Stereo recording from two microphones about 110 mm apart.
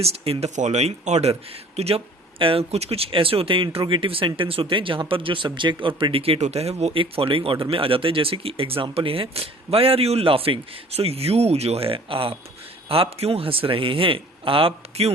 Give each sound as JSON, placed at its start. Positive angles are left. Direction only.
{"t": 0.0, "sound": "speech", "side_deg": -70}
{"t": 6.9, "sound": "speech", "side_deg": -55}